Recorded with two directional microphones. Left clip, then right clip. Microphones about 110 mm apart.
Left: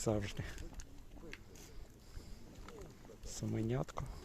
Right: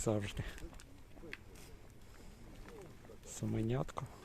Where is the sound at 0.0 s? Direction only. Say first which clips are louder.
Even; 20° right (ahead or behind).